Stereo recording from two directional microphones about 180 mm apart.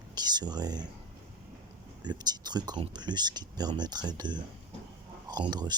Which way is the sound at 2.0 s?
25° right (ahead or behind).